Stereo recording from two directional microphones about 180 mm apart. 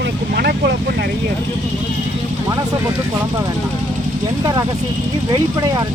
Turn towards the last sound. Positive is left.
turn(degrees=-20)  # may be behind; listen again after turning